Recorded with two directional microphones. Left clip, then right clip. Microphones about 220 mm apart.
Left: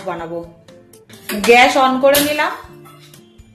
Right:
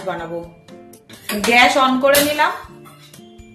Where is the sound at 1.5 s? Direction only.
20° left (ahead or behind).